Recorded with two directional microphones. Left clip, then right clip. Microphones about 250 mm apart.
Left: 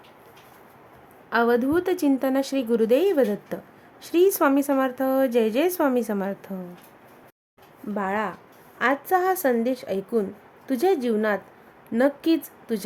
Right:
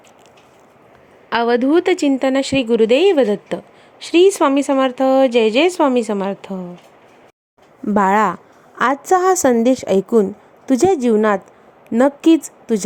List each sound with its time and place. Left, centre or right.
1.3 s a woman's voice: centre
7.9 s a woman's voice: right